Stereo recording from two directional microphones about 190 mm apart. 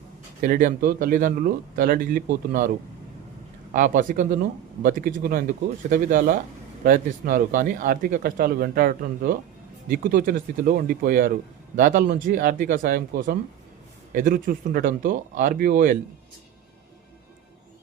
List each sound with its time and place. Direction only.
0.4 s speech: 45° right (ahead or behind)